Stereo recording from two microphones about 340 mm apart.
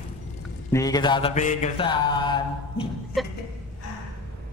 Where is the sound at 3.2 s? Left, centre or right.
Centre.